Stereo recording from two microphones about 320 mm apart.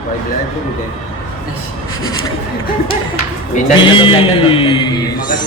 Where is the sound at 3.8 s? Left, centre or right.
Centre.